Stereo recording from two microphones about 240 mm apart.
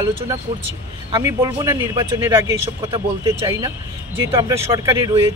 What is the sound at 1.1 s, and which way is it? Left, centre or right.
A man's voice, centre.